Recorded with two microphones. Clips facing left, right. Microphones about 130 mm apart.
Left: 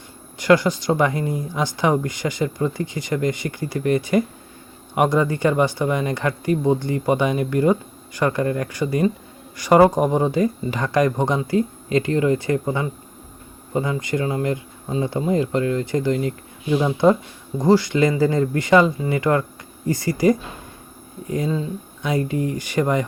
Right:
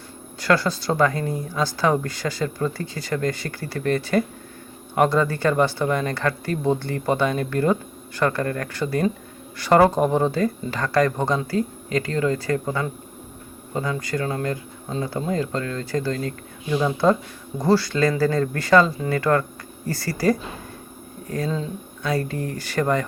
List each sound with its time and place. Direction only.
0.3 s speech: 15° left (ahead or behind)